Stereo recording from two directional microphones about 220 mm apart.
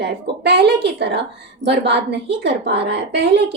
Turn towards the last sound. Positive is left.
turn(degrees=-50)  # may be behind; listen again after turning